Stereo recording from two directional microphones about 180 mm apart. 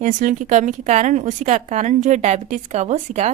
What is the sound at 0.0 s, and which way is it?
Speech, 45° right (ahead or behind).